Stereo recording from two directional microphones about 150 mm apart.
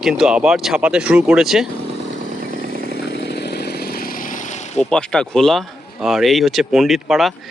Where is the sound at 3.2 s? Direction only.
90° left; by 4.8 s 50° left (ahead or behind).